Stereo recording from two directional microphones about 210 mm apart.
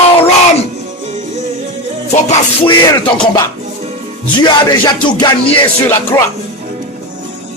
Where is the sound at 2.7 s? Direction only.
20° left (ahead or behind).